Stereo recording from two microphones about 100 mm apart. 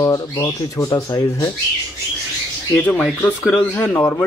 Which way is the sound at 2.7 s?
15° left (ahead or behind).